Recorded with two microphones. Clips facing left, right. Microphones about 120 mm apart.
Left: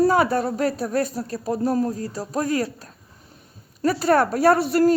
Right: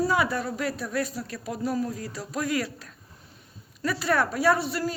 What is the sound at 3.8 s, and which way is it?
Speech, 40° left (ahead or behind).